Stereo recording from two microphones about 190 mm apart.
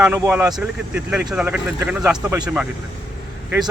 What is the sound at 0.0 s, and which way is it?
Speech, 10° right (ahead or behind).